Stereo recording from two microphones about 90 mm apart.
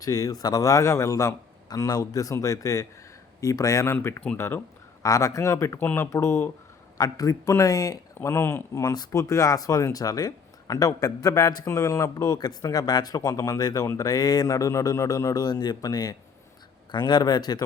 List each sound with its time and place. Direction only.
0.0 s speech: 45° left (ahead or behind)
1.9 s speech: 45° left (ahead or behind); by 4.6 s 30° left (ahead or behind)
5.0 s speech: 40° left (ahead or behind)
5.8 s speech: 20° left (ahead or behind)
6.1 s speech: 30° left (ahead or behind)
7.0 s a man's voice: 40° left (ahead or behind)